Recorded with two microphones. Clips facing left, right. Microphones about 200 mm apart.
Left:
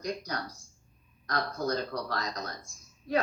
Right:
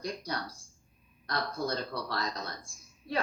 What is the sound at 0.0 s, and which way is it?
Speech, 30° right (ahead or behind).